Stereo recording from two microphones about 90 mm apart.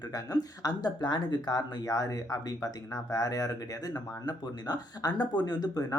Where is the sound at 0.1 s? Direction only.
45° left (ahead or behind).